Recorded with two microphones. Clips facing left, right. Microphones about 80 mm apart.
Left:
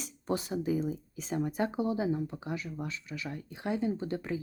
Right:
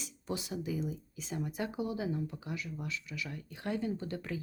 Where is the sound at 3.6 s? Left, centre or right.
Left.